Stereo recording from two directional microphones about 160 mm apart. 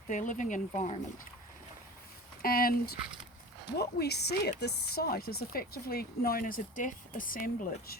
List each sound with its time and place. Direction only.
0.1 s speech: 50° left (ahead or behind)
2.4 s speech: 65° left (ahead or behind)
3.8 s speech: 90° left
4.6 s speech: 75° left (ahead or behind)